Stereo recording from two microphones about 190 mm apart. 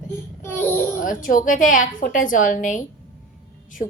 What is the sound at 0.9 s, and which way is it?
A woman's voice, 45° left (ahead or behind).